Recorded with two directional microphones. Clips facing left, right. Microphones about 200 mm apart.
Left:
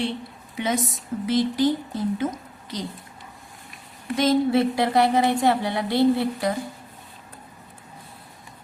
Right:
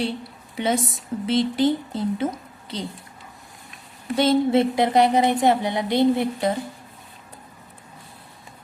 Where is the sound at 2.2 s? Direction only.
30° right (ahead or behind).